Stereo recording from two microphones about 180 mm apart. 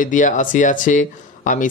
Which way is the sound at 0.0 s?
45° left (ahead or behind).